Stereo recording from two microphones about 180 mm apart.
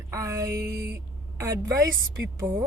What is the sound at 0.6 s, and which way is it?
Music, 60° right (ahead or behind).